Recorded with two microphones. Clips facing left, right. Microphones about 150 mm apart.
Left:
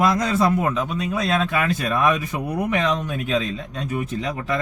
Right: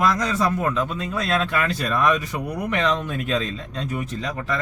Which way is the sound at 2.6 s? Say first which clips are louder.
Right 1 dB; centre (ahead or behind).